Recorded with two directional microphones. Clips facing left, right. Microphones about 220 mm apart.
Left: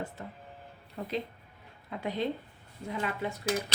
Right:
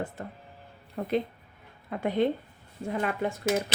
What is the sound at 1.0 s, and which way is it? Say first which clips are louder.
Speech: right 6 dB; 55° right (ahead or behind).